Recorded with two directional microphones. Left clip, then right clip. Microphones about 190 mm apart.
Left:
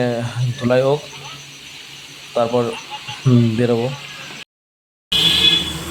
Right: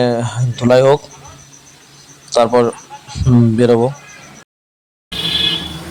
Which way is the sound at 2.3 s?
25° right (ahead or behind).